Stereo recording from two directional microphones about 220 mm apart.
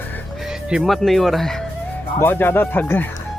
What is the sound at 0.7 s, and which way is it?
Speech, centre (ahead or behind).